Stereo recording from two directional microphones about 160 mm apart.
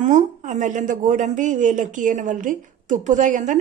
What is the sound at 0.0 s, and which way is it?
A woman's voice, 50° right (ahead or behind).